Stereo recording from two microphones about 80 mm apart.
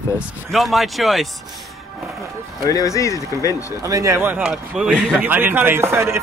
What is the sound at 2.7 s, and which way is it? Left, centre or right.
Speech, left.